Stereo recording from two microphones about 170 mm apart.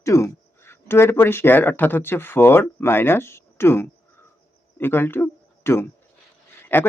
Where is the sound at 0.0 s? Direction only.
15° left (ahead or behind).